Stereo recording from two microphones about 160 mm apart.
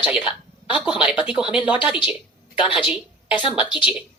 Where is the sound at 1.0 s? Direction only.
30° left (ahead or behind).